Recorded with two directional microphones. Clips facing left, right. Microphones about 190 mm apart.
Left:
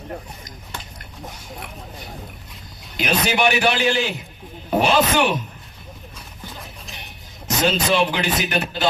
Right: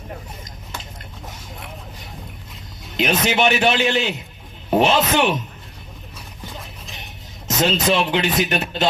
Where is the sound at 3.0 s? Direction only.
20° right (ahead or behind).